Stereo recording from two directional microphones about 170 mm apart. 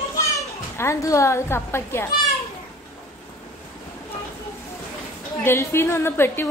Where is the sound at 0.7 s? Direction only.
15° left (ahead or behind).